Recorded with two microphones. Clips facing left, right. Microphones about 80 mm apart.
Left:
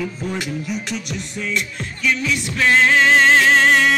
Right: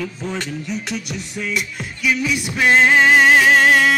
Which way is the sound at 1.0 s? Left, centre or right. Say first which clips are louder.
Even; centre.